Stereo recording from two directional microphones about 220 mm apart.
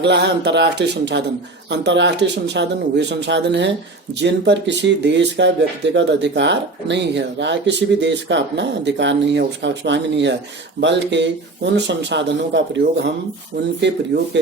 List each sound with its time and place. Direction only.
0.0 s speech: 50° right (ahead or behind)
14.1 s speech: 50° right (ahead or behind)